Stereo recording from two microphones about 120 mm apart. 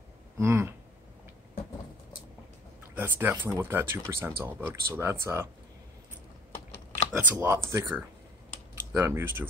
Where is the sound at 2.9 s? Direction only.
15° right (ahead or behind).